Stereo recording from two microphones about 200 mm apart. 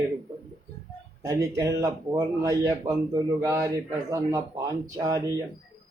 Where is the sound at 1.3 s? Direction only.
15° right (ahead or behind).